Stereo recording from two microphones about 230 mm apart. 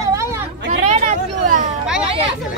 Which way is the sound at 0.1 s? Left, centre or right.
Centre.